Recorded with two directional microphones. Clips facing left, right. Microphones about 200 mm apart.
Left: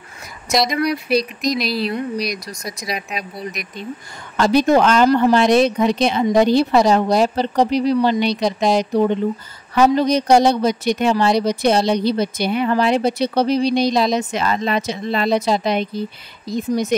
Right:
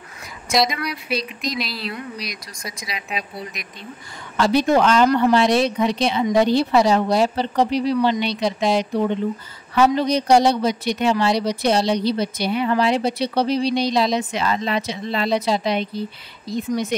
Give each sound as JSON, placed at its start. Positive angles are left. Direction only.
{"t": 0.7, "sound": "speech", "side_deg": 40}
{"t": 4.4, "sound": "speech", "side_deg": 45}
{"t": 5.0, "sound": "speech", "side_deg": 30}
{"t": 5.8, "sound": "speech", "side_deg": 45}